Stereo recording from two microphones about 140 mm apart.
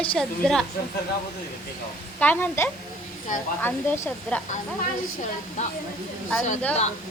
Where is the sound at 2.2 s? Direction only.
10° left (ahead or behind).